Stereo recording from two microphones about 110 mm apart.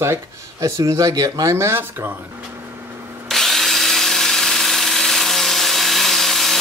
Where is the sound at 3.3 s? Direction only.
5° left (ahead or behind).